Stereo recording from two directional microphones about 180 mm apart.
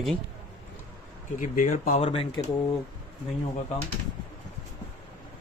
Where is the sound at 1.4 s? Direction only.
45° left (ahead or behind).